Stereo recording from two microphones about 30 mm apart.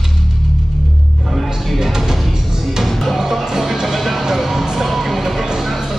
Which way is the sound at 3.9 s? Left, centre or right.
Centre.